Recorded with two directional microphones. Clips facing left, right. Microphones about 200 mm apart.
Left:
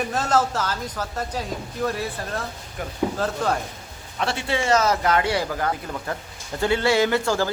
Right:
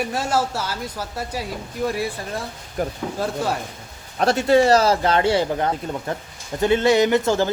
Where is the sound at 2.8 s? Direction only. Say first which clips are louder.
Right 8 dB; 40° right (ahead or behind).